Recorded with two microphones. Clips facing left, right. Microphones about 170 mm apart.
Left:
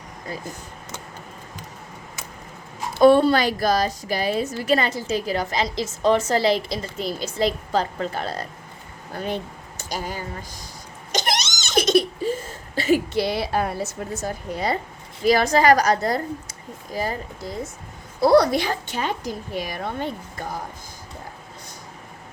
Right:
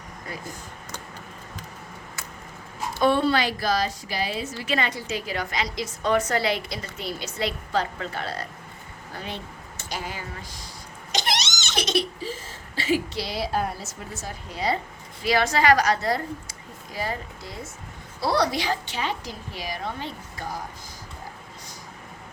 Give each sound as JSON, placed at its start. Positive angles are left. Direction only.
{"t": 3.0, "sound": "a woman's voice", "side_deg": 40}